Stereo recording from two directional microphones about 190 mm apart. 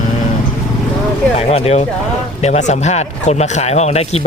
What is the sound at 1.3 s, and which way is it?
Speech, 35° left (ahead or behind).